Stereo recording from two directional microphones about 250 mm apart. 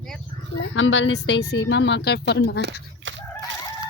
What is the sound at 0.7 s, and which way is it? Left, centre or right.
A woman's voice, left.